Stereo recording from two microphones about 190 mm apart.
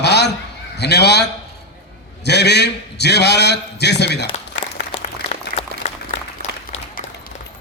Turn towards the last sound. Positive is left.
turn(degrees=35)  # may be behind; listen again after turning